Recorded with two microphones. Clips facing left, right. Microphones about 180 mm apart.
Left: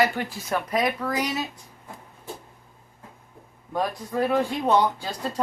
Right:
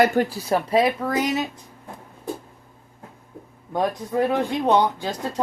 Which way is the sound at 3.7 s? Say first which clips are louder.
Right 3 dB; 20° right (ahead or behind).